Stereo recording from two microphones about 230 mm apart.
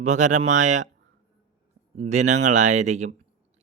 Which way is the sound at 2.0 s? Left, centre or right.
Right.